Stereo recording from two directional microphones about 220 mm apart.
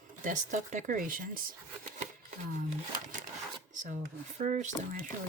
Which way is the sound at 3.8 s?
35° right (ahead or behind).